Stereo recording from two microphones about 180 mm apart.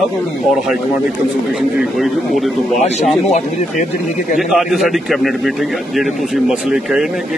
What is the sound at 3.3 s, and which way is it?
Speech, 40° left (ahead or behind).